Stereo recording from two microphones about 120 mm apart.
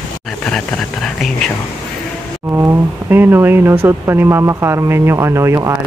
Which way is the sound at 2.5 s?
20° right (ahead or behind).